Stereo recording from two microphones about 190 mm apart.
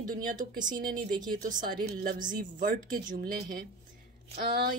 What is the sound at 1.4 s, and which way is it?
Speech, 45° right (ahead or behind).